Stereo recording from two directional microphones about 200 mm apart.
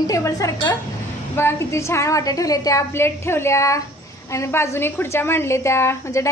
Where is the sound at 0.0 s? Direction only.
15° left (ahead or behind).